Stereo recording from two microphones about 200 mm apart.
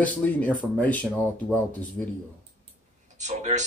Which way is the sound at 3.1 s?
35° right (ahead or behind).